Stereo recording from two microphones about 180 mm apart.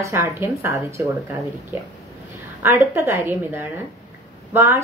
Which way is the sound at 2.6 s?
15° right (ahead or behind).